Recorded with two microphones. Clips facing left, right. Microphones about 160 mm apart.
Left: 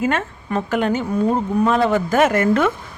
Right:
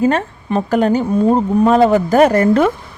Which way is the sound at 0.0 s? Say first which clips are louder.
Right 6 dB; 35° right (ahead or behind).